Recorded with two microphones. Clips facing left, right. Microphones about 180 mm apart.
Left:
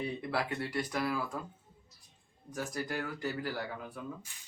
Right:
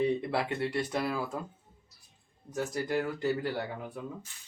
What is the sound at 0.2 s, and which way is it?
Speech, 25° right (ahead or behind).